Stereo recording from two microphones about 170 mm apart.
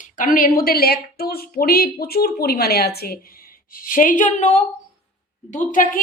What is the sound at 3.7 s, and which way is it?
Speech, 50° left (ahead or behind).